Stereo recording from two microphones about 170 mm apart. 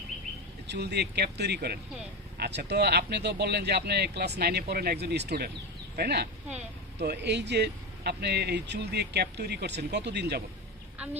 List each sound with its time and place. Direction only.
0.7 s speech: 75° right (ahead or behind)